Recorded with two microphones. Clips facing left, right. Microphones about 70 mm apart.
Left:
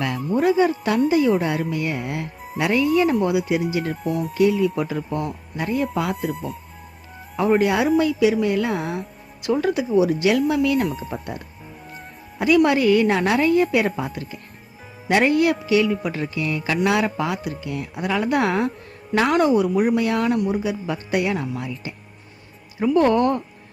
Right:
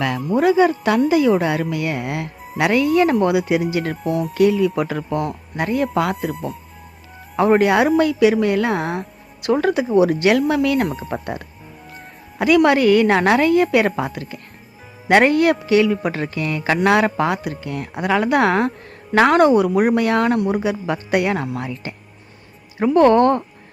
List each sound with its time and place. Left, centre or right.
0.3 s speech: right
0.9 s a woman's voice: right
2.6 s a woman's voice: right
4.0 s speech: centre
4.4 s a woman's voice: right
6.3 s speech: centre
7.3 s a woman's voice: right